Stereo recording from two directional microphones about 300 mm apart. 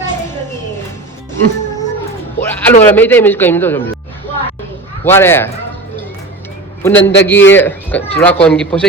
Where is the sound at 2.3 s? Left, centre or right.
Centre.